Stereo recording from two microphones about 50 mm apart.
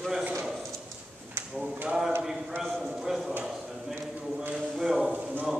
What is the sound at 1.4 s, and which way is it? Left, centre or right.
Drawer open or close, right.